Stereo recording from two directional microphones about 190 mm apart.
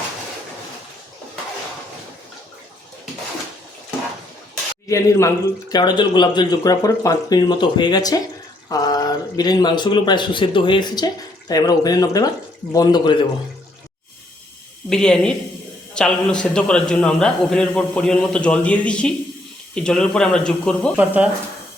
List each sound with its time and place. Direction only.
4.9 s speech: 15° left (ahead or behind)
14.8 s a man's voice: 5° left (ahead or behind)
20.9 s speech: 10° right (ahead or behind)